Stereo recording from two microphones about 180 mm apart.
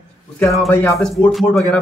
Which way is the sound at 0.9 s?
Centre (ahead or behind).